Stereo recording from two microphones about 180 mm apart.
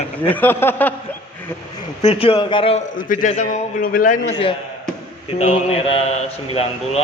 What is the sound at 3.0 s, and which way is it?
A man's voice, 45° left (ahead or behind).